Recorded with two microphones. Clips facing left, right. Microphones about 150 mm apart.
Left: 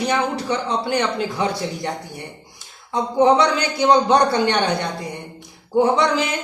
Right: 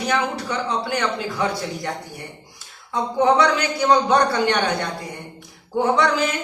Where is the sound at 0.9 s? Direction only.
25° left (ahead or behind).